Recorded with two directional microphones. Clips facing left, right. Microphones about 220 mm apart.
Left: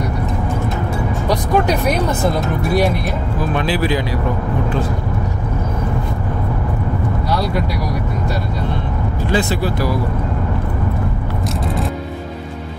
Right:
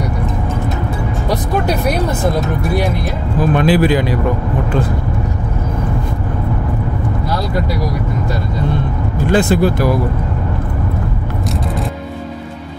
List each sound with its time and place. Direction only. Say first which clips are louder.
3.5 s speech: right 6 dB; 50° right (ahead or behind)
9.3 s speech: right 6 dB; 50° right (ahead or behind)